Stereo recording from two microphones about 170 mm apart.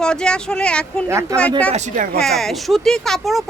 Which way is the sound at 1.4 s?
10° left (ahead or behind).